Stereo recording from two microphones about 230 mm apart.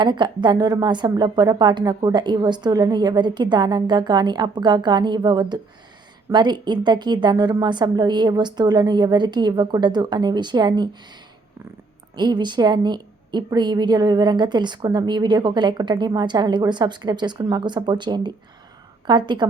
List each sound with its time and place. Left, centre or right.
0.0 s a woman's voice: centre
12.1 s a woman's voice: centre